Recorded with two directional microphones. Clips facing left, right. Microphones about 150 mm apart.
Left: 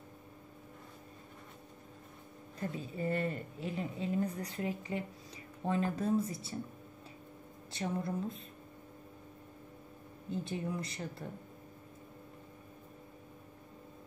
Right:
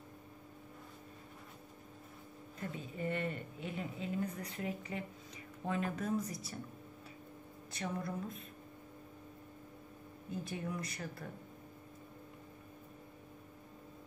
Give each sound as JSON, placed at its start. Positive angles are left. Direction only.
{"t": 2.6, "sound": "speech", "side_deg": 35}
{"t": 7.7, "sound": "speech", "side_deg": 30}
{"t": 10.3, "sound": "speech", "side_deg": 25}